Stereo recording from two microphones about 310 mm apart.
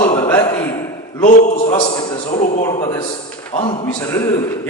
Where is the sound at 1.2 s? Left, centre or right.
Left.